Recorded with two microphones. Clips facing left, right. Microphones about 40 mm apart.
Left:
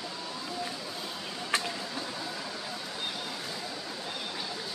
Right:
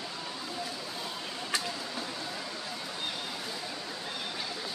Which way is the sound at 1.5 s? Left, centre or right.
Left.